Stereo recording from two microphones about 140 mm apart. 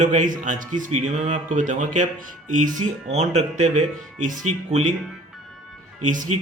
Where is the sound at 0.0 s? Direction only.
65° right (ahead or behind).